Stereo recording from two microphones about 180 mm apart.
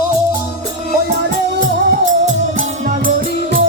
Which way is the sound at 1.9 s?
45° right (ahead or behind).